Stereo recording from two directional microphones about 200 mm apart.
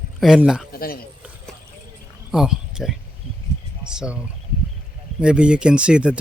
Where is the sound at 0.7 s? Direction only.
50° left (ahead or behind).